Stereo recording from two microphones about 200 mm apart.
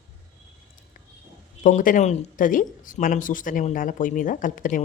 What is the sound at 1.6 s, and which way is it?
Speech, 40° left (ahead or behind).